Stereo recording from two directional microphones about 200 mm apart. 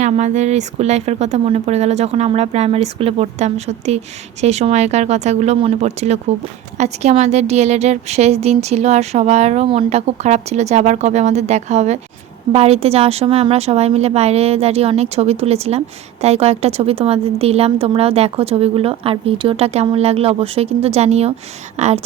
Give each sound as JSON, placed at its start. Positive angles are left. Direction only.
{"t": 0.0, "sound": "a woman's voice", "side_deg": -35}